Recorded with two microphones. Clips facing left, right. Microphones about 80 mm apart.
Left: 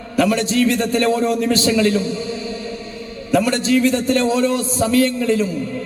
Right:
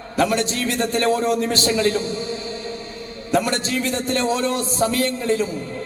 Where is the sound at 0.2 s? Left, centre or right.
Right.